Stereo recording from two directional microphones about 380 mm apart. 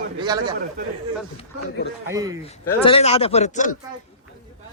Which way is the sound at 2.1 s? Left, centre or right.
Centre.